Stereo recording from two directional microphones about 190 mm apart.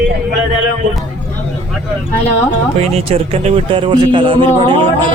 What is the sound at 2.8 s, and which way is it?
Speech, 30° right (ahead or behind).